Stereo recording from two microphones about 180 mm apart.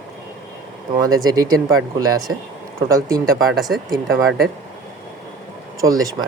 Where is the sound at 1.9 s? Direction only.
20° right (ahead or behind).